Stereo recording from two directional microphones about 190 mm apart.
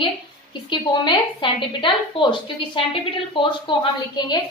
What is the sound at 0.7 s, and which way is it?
A woman's voice, 25° left (ahead or behind).